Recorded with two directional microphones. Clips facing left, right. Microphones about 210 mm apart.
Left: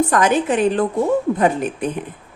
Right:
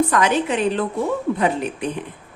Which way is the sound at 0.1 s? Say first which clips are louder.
Left 2 dB; 45° left (ahead or behind).